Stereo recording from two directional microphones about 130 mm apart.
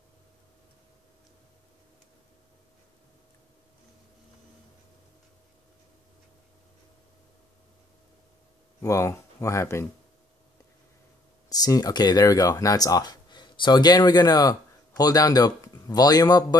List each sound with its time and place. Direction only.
8.8 s speech: 25° left (ahead or behind)
11.4 s speech: 30° left (ahead or behind)